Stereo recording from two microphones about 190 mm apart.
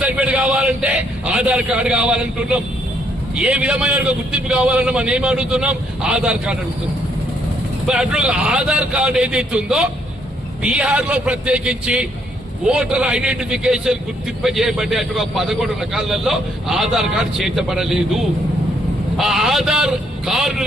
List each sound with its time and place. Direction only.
0.0 s a man's voice: 5° right (ahead or behind)
7.9 s a man's voice: 5° right (ahead or behind)